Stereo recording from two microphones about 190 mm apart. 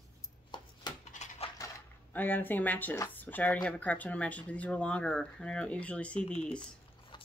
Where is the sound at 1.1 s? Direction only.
35° left (ahead or behind).